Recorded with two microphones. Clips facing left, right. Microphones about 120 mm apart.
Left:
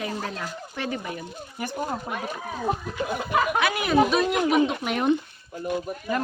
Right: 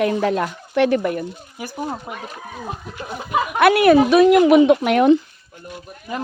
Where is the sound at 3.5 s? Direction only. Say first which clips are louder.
Right 12 dB; 65° right (ahead or behind); by 5.2 s 80° right.